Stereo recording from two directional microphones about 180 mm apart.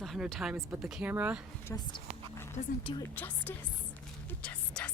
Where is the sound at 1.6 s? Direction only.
20° left (ahead or behind).